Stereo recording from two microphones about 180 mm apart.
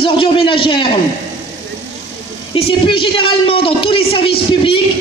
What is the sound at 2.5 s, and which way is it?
A woman's voice, 30° left (ahead or behind).